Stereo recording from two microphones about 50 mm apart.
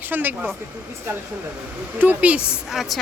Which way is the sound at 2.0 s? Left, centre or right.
Right.